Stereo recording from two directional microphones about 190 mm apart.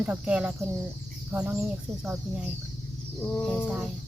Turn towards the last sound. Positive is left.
turn(degrees=0)  # may be behind; listen again after turning